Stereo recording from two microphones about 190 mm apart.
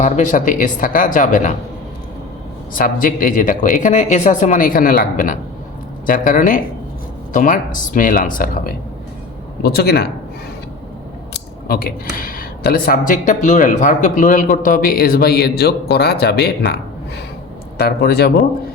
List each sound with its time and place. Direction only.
0.0 s speech: 40° left (ahead or behind)
2.7 s speech: 45° left (ahead or behind)
11.3 s speech: 50° left (ahead or behind)
17.7 s speech: 55° left (ahead or behind)